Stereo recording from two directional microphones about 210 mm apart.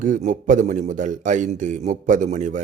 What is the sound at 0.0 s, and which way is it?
A man's voice, 35° right (ahead or behind).